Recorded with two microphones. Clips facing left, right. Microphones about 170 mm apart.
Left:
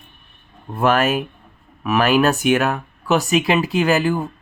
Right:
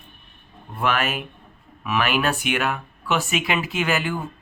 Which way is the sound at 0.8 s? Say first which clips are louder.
Left 7 dB; 45° left (ahead or behind).